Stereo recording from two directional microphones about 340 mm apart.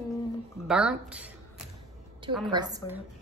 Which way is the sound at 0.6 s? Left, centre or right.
Centre.